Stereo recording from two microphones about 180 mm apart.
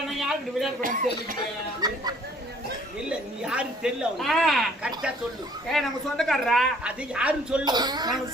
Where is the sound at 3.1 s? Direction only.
5° right (ahead or behind).